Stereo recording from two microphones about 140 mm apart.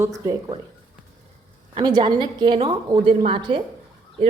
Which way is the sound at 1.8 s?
35° right (ahead or behind).